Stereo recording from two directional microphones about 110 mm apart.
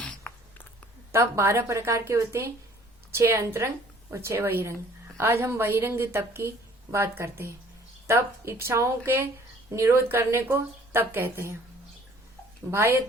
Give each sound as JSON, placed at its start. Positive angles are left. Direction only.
{"t": 0.0, "sound": "a sound", "side_deg": 10}
{"t": 1.1, "sound": "a woman's voice", "side_deg": -25}
{"t": 12.7, "sound": "a woman's voice", "side_deg": -25}